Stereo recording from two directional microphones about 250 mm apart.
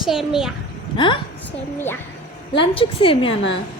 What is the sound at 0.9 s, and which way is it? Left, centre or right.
Speech, centre.